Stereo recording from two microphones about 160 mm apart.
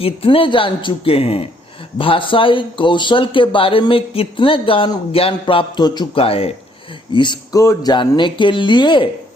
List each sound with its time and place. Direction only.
0.0 s speech: 35° left (ahead or behind)